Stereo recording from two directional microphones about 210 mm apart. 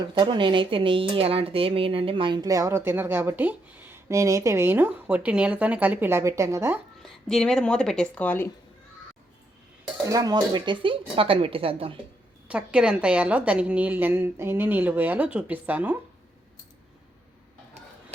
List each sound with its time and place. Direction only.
0.1 s speech: 20° right (ahead or behind)
7.0 s speech: centre (ahead or behind)
10.1 s speech: 15° right (ahead or behind)
12.5 s speech: 5° right (ahead or behind)